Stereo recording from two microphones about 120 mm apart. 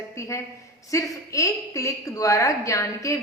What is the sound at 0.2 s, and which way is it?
A woman's voice, 25° left (ahead or behind).